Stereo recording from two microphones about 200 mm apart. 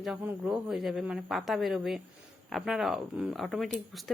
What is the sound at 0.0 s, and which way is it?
Speech, 5° right (ahead or behind).